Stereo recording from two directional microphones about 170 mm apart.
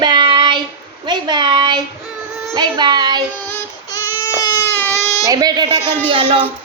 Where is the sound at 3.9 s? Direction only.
20° left (ahead or behind).